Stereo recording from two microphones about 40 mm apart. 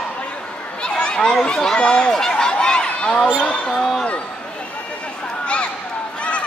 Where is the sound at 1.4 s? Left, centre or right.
Centre.